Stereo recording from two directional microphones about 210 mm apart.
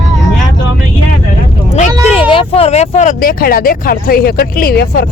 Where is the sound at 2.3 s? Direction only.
25° left (ahead or behind).